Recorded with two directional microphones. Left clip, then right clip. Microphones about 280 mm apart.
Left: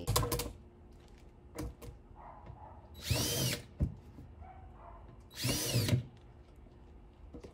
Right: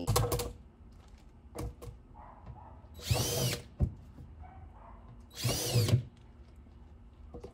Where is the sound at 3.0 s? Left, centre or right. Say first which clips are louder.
Right 2 dB; centre.